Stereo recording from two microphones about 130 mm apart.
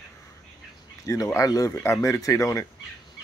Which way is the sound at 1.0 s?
25° left (ahead or behind).